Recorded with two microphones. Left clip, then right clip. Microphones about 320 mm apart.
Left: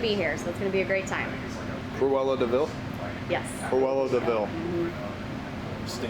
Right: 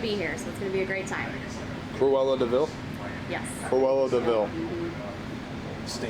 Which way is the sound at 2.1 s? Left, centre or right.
Right.